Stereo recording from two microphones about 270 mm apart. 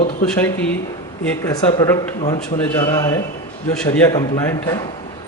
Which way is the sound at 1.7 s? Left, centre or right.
Centre.